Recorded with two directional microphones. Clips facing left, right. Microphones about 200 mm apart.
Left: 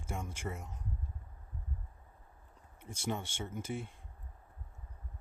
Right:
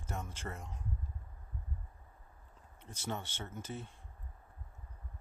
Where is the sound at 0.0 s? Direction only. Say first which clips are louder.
Left 2 dB; 10° left (ahead or behind).